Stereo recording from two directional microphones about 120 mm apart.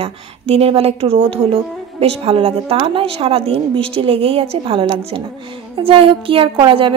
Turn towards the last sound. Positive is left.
turn(degrees=-45)  # may be behind; listen again after turning